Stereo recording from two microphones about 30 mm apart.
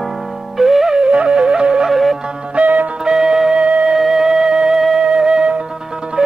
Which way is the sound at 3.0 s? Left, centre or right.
Right.